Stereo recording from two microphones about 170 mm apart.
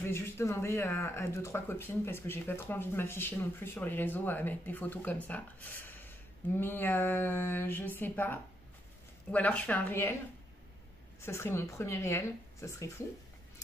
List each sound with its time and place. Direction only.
0.0 s speech: 15° left (ahead or behind)
11.1 s speech: 15° left (ahead or behind)